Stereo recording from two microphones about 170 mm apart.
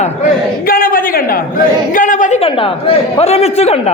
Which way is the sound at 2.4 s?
30° left (ahead or behind).